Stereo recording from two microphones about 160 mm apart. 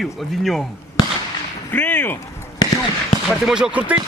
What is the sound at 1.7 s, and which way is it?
Speech, 10° left (ahead or behind).